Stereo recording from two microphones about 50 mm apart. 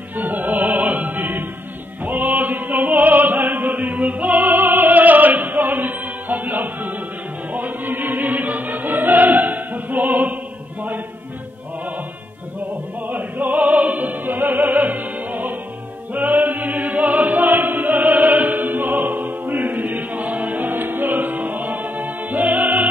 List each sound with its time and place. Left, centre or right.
0.1 s music: right
13.0 s opera: right
16.1 s choir: right